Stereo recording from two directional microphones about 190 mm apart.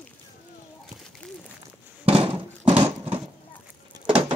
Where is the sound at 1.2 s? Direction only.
5° left (ahead or behind).